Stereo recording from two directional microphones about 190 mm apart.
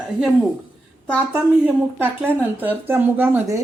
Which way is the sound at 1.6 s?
10° right (ahead or behind).